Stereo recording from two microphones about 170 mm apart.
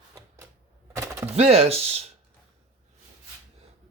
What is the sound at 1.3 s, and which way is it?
Speech, 40° right (ahead or behind).